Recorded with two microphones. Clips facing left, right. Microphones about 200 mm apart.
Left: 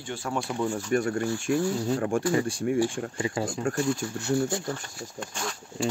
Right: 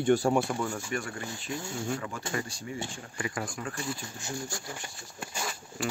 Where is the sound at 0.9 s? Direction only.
45° left (ahead or behind).